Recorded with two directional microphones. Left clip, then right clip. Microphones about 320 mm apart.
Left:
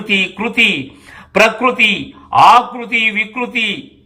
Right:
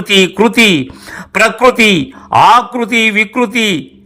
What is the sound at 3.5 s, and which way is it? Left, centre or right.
Speech, centre.